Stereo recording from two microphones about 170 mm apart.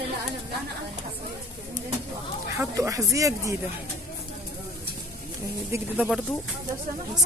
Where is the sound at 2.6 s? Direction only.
20° right (ahead or behind).